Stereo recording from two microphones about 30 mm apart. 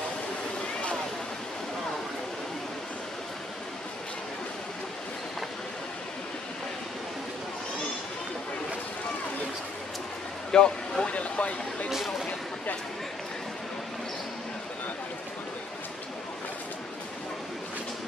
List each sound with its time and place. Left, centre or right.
10.5 s a sound: left
11.1 s speech: left
11.9 s speech: centre